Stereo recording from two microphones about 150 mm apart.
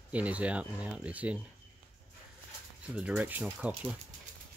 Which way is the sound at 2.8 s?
5° right (ahead or behind).